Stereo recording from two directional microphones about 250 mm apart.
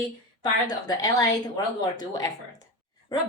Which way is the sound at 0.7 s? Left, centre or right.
Centre.